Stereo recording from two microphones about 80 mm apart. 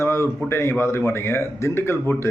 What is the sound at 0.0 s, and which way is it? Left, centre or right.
A man's voice, left.